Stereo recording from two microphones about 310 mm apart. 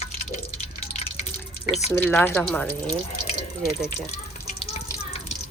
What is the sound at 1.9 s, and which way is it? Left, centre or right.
Speech, centre.